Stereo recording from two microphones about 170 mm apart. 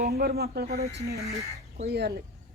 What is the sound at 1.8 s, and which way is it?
Speech, 70° right (ahead or behind).